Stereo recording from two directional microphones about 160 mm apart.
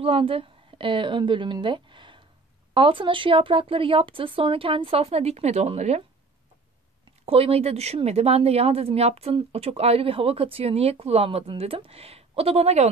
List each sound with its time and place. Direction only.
0.0 s a woman's voice: 35° right (ahead or behind)
7.2 s speech: 35° right (ahead or behind)